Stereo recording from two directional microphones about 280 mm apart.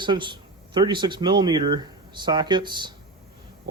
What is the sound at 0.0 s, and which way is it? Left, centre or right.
Speech, centre.